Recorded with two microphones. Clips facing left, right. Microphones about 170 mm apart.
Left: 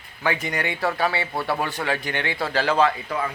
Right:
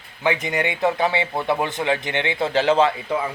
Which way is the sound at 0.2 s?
20° right (ahead or behind).